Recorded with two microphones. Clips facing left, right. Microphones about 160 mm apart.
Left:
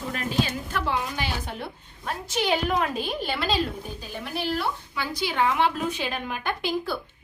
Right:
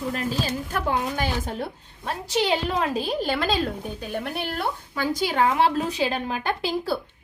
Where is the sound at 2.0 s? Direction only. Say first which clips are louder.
Right 3 dB; 30° right (ahead or behind).